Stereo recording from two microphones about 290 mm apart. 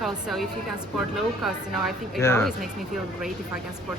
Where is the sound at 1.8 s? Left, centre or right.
Centre.